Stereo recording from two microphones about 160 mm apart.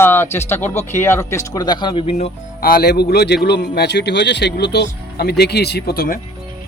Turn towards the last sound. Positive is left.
turn(degrees=65)  # may be behind; listen again after turning